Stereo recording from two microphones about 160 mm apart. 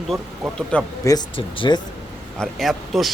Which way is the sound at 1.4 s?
30° left (ahead or behind).